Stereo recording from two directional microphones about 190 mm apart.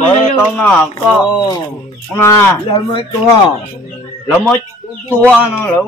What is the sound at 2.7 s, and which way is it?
Speech, 25° left (ahead or behind).